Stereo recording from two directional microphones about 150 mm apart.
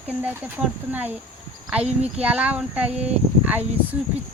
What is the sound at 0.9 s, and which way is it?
Speech, 10° right (ahead or behind).